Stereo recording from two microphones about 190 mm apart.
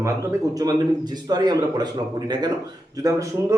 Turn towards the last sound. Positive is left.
turn(degrees=-15)  # may be behind; listen again after turning